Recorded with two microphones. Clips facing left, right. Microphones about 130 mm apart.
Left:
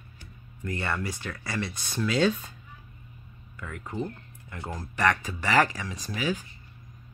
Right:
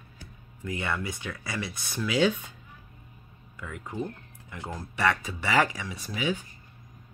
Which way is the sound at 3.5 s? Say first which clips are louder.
Left 1 dB; 15° right (ahead or behind).